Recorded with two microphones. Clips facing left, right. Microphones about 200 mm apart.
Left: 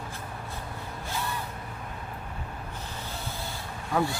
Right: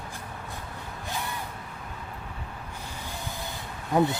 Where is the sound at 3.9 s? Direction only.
20° right (ahead or behind).